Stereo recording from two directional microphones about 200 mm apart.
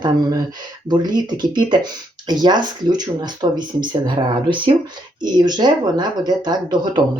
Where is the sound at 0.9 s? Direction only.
20° right (ahead or behind).